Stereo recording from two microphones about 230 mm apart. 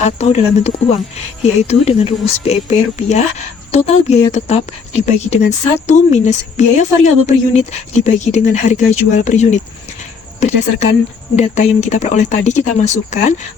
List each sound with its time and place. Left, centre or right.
0.0 s speech: left